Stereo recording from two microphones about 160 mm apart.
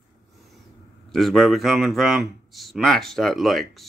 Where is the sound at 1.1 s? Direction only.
Centre (ahead or behind).